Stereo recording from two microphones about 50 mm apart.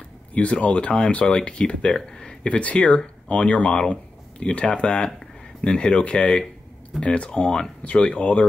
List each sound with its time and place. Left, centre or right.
0.3 s speech: left; by 2.3 s centre
2.4 s speech: left